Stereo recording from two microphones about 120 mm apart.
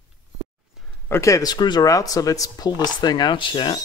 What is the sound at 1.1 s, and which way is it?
Speech, 25° left (ahead or behind).